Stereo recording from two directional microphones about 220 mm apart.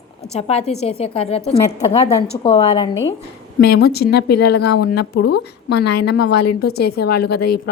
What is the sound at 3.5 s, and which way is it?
A woman's voice, 45° left (ahead or behind).